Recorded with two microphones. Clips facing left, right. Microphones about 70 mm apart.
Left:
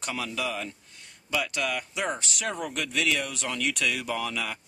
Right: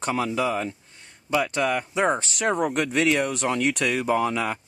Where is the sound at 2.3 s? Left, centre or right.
Right.